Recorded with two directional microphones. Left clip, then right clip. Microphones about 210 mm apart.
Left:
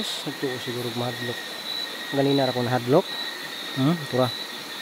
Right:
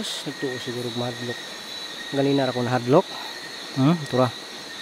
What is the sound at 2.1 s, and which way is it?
Speech, 10° right (ahead or behind).